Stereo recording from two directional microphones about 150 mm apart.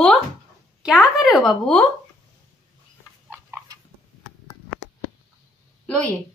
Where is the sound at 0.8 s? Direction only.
5° right (ahead or behind).